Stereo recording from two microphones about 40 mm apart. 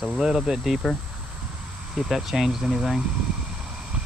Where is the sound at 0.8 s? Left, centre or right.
Centre.